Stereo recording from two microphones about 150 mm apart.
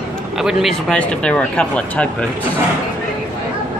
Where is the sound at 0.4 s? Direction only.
Centre (ahead or behind).